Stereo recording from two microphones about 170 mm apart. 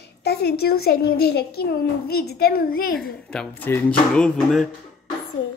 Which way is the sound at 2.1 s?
65° left (ahead or behind).